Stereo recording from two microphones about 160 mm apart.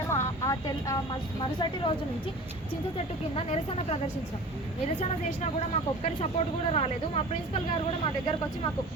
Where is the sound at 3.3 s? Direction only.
40° left (ahead or behind).